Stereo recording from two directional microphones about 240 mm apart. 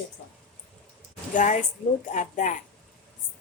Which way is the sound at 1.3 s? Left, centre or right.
Left.